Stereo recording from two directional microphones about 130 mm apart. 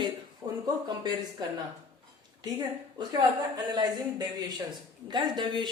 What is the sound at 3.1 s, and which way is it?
Speech, 30° right (ahead or behind).